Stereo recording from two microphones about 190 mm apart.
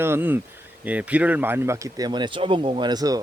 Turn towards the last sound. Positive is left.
turn(degrees=-20)  # may be behind; listen again after turning